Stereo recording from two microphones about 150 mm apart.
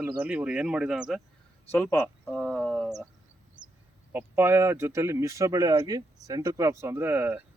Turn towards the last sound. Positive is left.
turn(degrees=-10)  # may be behind; listen again after turning